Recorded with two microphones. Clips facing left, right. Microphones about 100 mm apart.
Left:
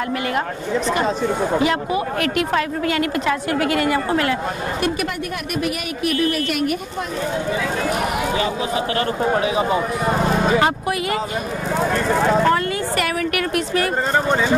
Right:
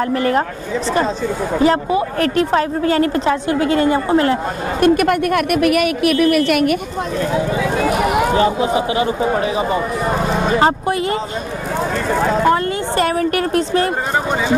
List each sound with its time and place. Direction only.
0.1 s speech: 35° right (ahead or behind)
1.6 s speech: 35° right (ahead or behind)
4.8 s a woman's voice: 55° right (ahead or behind); by 6.7 s 75° right (ahead or behind)
9.2 s speech: centre (ahead or behind)
10.6 s speech: 30° right (ahead or behind)
11.8 s speech: centre (ahead or behind)
12.9 s speech: 30° right (ahead or behind)